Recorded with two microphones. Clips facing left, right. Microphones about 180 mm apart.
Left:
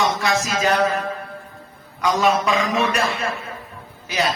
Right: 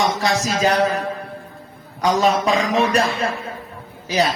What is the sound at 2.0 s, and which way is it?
Speech, 35° right (ahead or behind).